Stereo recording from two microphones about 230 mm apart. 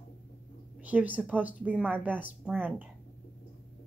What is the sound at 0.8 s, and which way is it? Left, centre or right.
Speech, centre.